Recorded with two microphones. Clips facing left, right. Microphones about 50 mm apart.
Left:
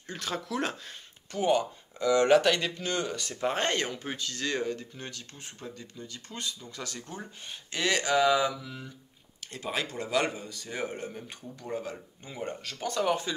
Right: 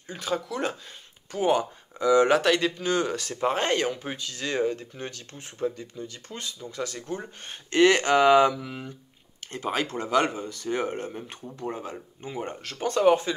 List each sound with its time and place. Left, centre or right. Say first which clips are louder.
0.0 s speech: right 5 dB; centre
1.3 s speech: right 2 dB; right; by 2.7 s centre
2.8 s speech: right 6 dB; centre
4.7 s speech: right 4 dB; right
7.4 s speech: right 12 dB; right
7.9 s speech: right 2 dB; right
8.5 s speech: right 6 dB; right
9.9 s speech: right 5 dB; right
10.6 s speech: right 7 dB; right
12.7 s speech: right 8 dB; right